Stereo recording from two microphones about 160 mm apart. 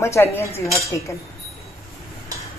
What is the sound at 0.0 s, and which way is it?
Speech, 15° left (ahead or behind).